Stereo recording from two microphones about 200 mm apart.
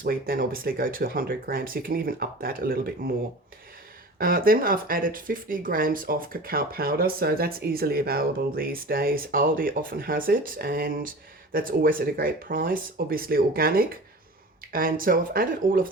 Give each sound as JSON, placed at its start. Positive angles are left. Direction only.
{"t": 0.0, "sound": "speech", "side_deg": -45}
{"t": 4.2, "sound": "speech", "side_deg": -45}